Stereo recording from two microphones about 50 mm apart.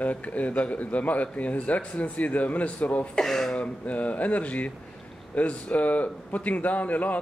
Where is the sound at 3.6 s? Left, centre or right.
Left.